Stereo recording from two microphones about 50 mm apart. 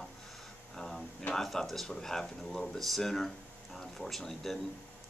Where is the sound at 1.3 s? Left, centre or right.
Centre.